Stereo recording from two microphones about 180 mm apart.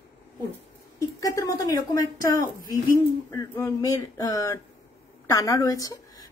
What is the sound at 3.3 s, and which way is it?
A woman's voice, 15° left (ahead or behind).